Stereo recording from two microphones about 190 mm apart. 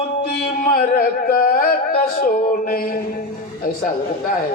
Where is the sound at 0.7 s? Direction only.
50° left (ahead or behind).